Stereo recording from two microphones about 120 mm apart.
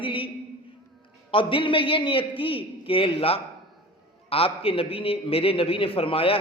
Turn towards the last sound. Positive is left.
turn(degrees=50)  # may be behind; listen again after turning